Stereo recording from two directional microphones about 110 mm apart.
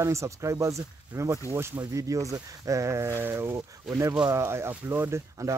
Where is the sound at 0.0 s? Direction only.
25° right (ahead or behind).